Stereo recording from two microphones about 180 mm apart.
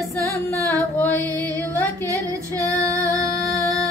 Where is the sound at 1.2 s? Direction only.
20° right (ahead or behind).